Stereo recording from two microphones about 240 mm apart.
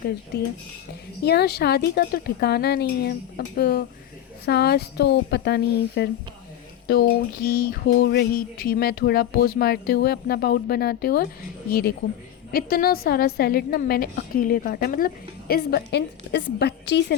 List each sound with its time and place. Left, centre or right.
1.2 s speech: left
7.4 s a woman's voice: left